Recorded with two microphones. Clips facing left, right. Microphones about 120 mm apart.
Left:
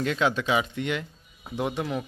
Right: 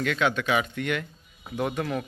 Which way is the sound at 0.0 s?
30° left (ahead or behind).